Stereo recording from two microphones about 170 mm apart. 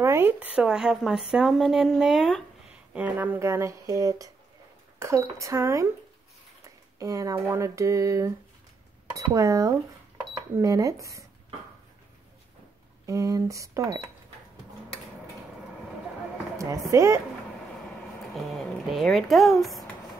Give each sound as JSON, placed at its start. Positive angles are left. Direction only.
{"t": 0.0, "sound": "speech", "side_deg": -15}
{"t": 7.0, "sound": "speech", "side_deg": -20}
{"t": 13.0, "sound": "speech", "side_deg": -20}
{"t": 16.5, "sound": "speech", "side_deg": -20}
{"t": 18.3, "sound": "speech", "side_deg": 0}